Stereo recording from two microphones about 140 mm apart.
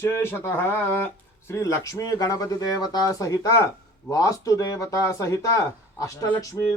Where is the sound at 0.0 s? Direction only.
15° left (ahead or behind).